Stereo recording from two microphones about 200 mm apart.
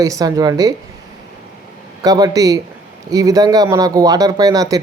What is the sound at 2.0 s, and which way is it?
Speech, 20° right (ahead or behind).